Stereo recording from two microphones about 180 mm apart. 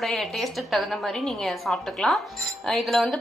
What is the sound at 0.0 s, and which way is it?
Speech, centre (ahead or behind).